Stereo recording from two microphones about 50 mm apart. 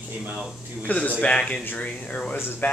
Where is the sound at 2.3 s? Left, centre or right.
Left.